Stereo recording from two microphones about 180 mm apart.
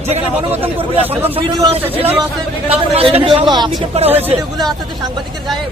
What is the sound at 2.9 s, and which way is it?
Speech, 30° right (ahead or behind).